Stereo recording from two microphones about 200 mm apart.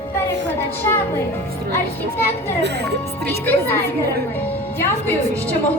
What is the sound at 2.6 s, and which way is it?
Speech, 60° right (ahead or behind).